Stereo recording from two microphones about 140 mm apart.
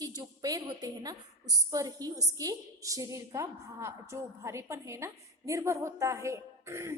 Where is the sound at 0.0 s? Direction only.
25° right (ahead or behind).